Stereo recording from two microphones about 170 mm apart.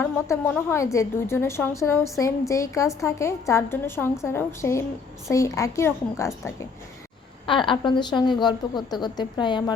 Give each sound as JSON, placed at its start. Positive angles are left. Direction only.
{"t": 0.0, "sound": "a woman's voice", "side_deg": 10}
{"t": 7.4, "sound": "a woman's voice", "side_deg": 30}